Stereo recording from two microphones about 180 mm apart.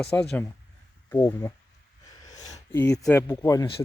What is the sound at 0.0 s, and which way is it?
Speech, 5° left (ahead or behind).